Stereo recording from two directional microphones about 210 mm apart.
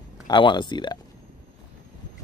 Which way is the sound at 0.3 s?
20° left (ahead or behind).